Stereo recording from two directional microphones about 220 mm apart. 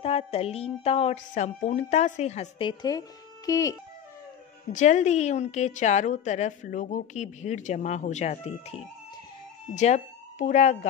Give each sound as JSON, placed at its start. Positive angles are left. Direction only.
{"t": 0.0, "sound": "a woman's voice", "side_deg": 25}
{"t": 4.7, "sound": "a woman's voice", "side_deg": 30}